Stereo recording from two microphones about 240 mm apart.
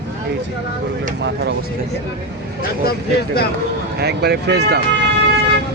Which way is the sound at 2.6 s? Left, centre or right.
Left.